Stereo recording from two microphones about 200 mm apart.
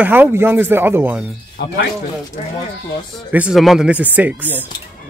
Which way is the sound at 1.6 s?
55° left (ahead or behind).